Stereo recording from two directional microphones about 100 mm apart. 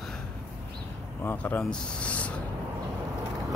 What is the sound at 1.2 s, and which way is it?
Speech, 15° left (ahead or behind).